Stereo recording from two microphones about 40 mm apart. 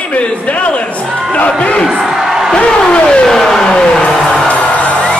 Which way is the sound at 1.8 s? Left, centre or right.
Centre.